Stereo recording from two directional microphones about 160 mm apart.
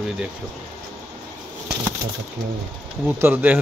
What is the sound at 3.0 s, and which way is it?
Speech, 10° right (ahead or behind).